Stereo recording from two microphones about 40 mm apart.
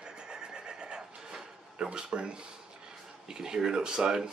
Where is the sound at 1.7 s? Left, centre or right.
Right.